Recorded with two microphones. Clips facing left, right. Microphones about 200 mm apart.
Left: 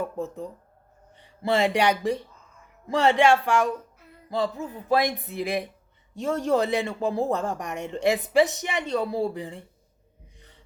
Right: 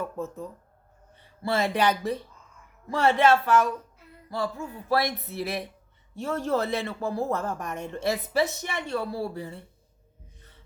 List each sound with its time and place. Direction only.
0.0 s speech: 15° left (ahead or behind)